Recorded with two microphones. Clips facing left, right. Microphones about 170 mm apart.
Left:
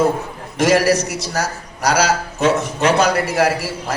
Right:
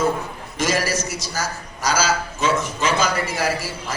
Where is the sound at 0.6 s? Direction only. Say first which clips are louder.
Left 8 dB; 70° left (ahead or behind).